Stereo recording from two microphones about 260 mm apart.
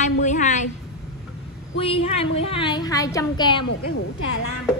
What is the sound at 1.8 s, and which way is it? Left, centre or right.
A woman's voice, left.